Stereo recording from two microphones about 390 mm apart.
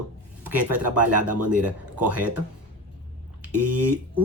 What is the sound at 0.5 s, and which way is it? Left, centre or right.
Speech, right.